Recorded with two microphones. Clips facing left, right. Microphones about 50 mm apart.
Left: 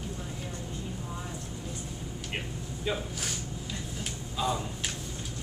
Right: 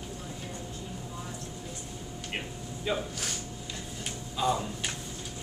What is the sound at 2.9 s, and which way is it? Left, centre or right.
Speech, centre.